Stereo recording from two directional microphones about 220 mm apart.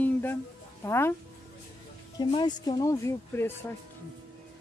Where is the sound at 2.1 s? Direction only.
20° left (ahead or behind).